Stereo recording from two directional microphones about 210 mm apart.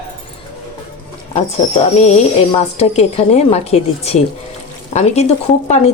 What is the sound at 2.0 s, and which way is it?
Speech, 30° left (ahead or behind).